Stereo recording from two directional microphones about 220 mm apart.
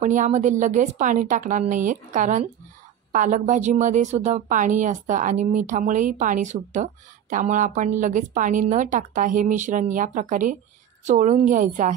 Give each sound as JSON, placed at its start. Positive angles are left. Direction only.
{"t": 0.0, "sound": "a woman's voice", "side_deg": -35}